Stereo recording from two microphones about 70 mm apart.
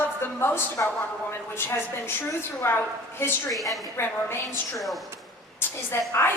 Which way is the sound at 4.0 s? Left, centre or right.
Left.